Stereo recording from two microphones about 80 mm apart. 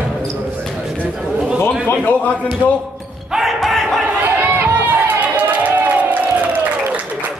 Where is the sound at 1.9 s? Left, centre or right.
Centre.